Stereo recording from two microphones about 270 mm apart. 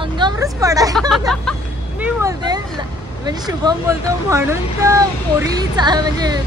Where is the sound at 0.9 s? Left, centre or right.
Centre.